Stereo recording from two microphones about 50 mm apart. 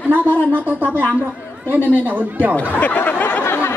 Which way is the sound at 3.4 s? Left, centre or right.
Left.